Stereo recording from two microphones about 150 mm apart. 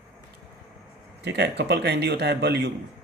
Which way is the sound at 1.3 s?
90° right.